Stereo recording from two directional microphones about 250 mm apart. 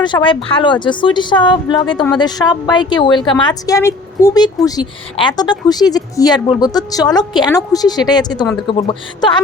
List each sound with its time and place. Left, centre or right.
0.0 s a woman's voice: centre